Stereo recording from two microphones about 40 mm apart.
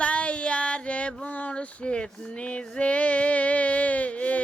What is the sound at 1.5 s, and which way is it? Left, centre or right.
Female singing, left.